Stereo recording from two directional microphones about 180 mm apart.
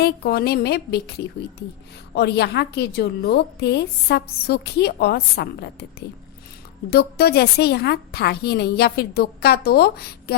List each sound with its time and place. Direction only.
0.0 s a woman's voice: 60° left (ahead or behind)
6.9 s a woman's voice: 60° left (ahead or behind)